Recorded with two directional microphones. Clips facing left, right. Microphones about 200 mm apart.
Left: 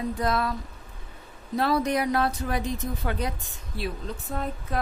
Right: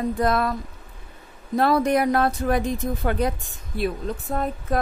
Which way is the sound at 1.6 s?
55° right (ahead or behind).